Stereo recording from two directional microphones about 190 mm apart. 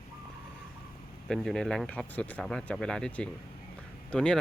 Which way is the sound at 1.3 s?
Centre (ahead or behind).